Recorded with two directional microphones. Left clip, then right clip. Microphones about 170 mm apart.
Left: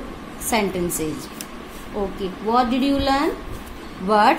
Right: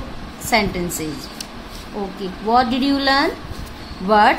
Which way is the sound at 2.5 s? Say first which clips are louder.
Right 3 dB; 30° right (ahead or behind).